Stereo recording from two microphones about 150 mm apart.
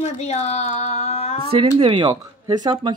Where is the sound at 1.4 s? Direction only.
40° right (ahead or behind).